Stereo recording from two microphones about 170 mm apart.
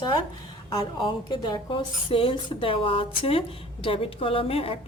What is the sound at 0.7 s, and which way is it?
A woman's voice, 25° left (ahead or behind).